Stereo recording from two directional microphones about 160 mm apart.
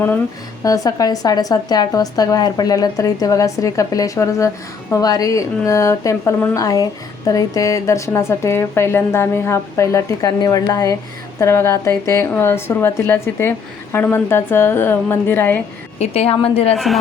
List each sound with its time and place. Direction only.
0.6 s a woman's voice: 20° left (ahead or behind)
16.0 s a woman's voice: 40° left (ahead or behind)
16.7 s a woman's voice: centre (ahead or behind)